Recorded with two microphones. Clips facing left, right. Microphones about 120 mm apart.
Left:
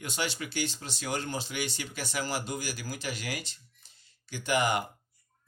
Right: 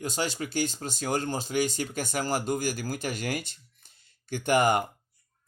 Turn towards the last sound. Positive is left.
turn(degrees=-45)  # may be behind; listen again after turning